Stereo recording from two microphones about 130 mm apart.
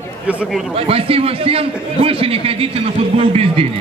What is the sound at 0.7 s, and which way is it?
A man's voice, 50° right (ahead or behind).